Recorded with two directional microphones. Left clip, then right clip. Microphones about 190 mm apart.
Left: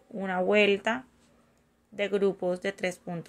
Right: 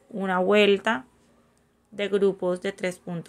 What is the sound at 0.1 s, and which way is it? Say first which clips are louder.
Speech: right 4 dB; 15° right (ahead or behind).